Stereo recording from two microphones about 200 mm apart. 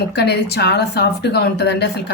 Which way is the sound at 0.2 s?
55° left (ahead or behind).